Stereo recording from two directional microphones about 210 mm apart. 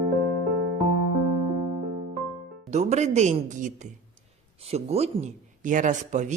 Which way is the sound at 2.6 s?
35° right (ahead or behind).